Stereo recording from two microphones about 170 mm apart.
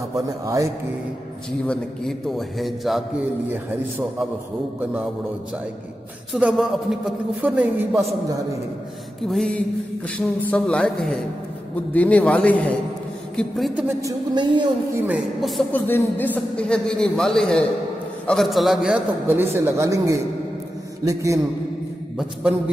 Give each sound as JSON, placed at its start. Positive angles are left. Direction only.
{"t": 1.7, "sound": "a man's voice", "side_deg": 5}
{"t": 6.3, "sound": "a man's voice", "side_deg": 0}
{"t": 9.3, "sound": "a man's voice", "side_deg": 0}
{"t": 14.3, "sound": "a woman's voice", "side_deg": -25}
{"t": 15.7, "sound": "a man's voice", "side_deg": 10}
{"t": 22.1, "sound": "a man's voice", "side_deg": -10}